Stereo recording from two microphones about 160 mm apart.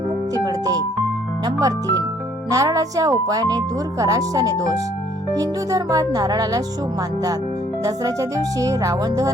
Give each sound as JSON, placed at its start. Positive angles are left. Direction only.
{"t": 0.3, "sound": "music", "side_deg": -25}
{"t": 1.5, "sound": "speech", "side_deg": -25}
{"t": 7.9, "sound": "speech", "side_deg": -20}